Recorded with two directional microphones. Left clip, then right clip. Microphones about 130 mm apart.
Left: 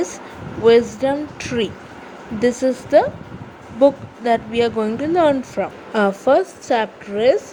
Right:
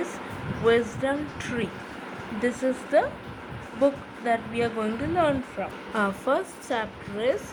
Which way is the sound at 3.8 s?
55° left (ahead or behind).